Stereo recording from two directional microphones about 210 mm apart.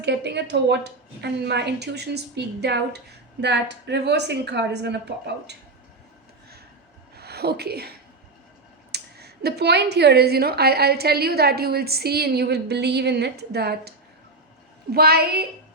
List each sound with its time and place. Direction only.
0.0 s a woman's voice: 55° right (ahead or behind)
7.2 s a woman's voice: 50° right (ahead or behind)
14.9 s a woman's voice: 45° right (ahead or behind)